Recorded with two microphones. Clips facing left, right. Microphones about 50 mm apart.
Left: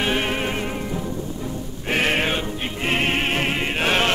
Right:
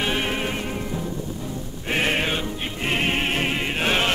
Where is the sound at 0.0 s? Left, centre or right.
Centre.